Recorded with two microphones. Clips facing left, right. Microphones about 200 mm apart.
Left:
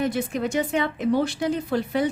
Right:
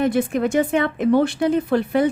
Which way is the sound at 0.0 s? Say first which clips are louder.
Right 6 dB; 55° right (ahead or behind).